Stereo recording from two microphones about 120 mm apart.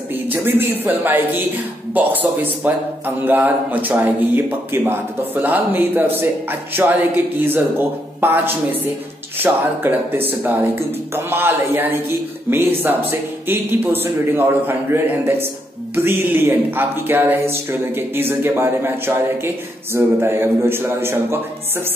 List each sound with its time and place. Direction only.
0.3 s speech: 20° right (ahead or behind)